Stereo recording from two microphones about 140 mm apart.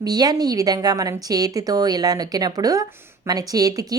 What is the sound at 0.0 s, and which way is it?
Speech, 30° right (ahead or behind).